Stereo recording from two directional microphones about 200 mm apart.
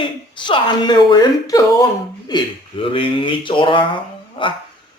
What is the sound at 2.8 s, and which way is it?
Speech, 25° left (ahead or behind).